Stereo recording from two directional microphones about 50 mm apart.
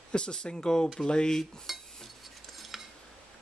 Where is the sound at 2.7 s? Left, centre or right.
Centre.